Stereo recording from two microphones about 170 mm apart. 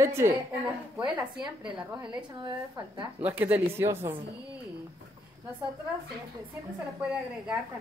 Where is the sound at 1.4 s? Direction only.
25° right (ahead or behind).